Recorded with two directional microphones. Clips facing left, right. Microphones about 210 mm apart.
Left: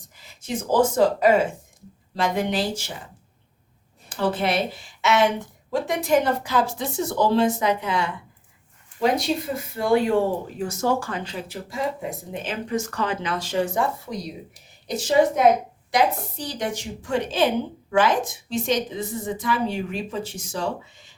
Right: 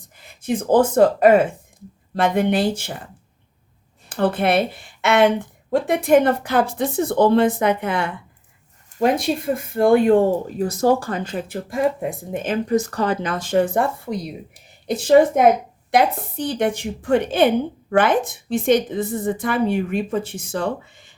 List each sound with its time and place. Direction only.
0.0 s a woman's voice: 55° right (ahead or behind)
4.1 s a woman's voice: 55° right (ahead or behind)
10.6 s a woman's voice: 35° right (ahead or behind); by 21.2 s 55° right (ahead or behind)